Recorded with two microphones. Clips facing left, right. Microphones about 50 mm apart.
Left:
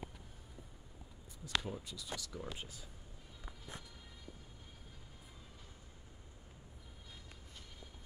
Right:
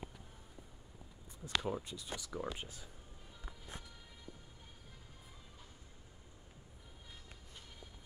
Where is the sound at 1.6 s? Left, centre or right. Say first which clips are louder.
Right 5 dB; right.